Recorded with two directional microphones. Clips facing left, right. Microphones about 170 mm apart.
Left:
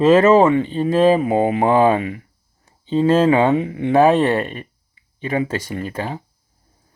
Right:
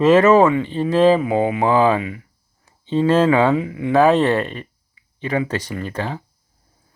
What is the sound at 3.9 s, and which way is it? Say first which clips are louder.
Speech: even; 15° left (ahead or behind).